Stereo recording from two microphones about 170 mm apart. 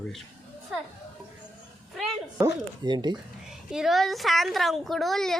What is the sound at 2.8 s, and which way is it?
Speech, 25° right (ahead or behind).